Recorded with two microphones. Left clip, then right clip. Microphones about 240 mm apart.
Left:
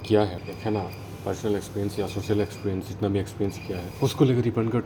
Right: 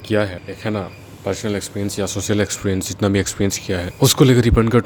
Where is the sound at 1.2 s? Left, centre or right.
Right.